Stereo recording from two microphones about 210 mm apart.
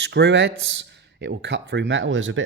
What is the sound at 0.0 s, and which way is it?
Speech, 55° right (ahead or behind).